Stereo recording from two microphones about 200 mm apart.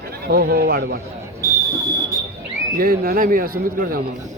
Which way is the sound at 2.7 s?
45° right (ahead or behind).